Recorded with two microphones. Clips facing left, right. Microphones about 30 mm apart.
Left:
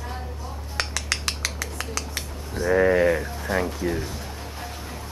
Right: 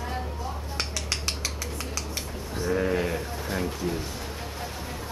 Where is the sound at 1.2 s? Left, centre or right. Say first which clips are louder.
Left 3 dB; centre.